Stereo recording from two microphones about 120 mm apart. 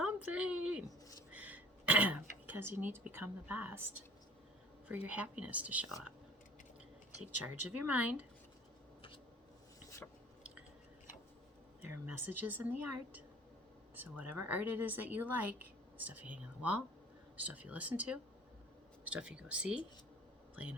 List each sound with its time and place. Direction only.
0.0 s a sound: 10° right (ahead or behind)
1.3 s throat clearing: 10° right (ahead or behind)
4.9 s speech: 10° right (ahead or behind)
7.2 s speech: 15° right (ahead or behind)
11.8 s speech: 15° right (ahead or behind)
13.9 s speech: 15° right (ahead or behind)